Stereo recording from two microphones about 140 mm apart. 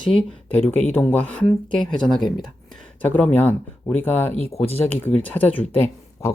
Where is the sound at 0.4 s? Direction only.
15° left (ahead or behind).